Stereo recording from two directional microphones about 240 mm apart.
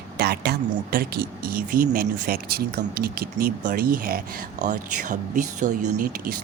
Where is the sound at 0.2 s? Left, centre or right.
Right.